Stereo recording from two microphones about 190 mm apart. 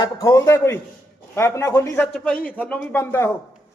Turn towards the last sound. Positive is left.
turn(degrees=10)  # may be behind; listen again after turning